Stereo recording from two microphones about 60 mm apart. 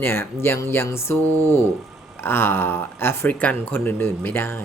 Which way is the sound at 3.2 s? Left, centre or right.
Left.